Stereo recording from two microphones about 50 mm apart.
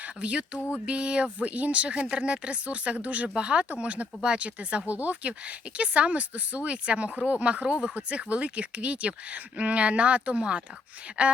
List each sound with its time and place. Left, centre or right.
0.0 s speech: right